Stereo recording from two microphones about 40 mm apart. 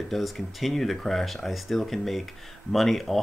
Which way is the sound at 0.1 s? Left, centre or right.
Centre.